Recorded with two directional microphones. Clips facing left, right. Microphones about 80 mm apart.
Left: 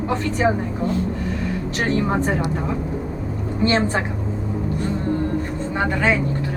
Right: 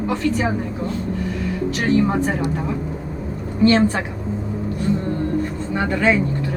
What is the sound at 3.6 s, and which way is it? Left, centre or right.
Speech, left.